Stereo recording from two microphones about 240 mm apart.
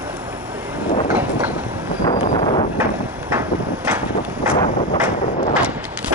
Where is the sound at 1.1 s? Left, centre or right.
Centre.